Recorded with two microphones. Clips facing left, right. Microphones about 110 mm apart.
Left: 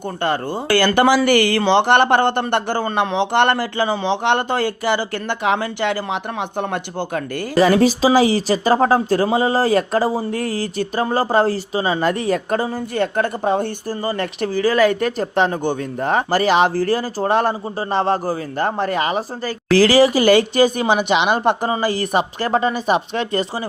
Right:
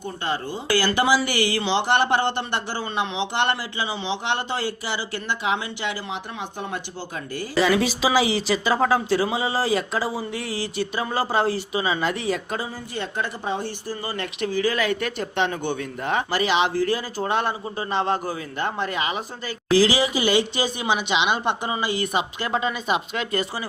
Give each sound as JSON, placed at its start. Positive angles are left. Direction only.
{"t": 0.2, "sound": "speech", "side_deg": 55}